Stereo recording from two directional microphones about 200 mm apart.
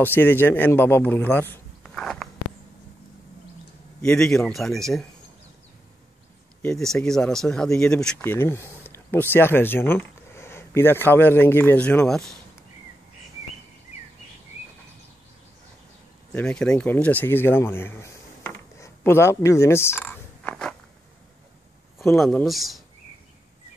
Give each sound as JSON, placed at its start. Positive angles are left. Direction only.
{"t": 0.0, "sound": "speech", "side_deg": 10}
{"t": 1.8, "sound": "biting", "side_deg": 0}
{"t": 4.0, "sound": "a man's voice", "side_deg": 5}
{"t": 6.6, "sound": "speech", "side_deg": 5}
{"t": 16.3, "sound": "speech", "side_deg": 5}
{"t": 22.0, "sound": "a man's voice", "side_deg": 10}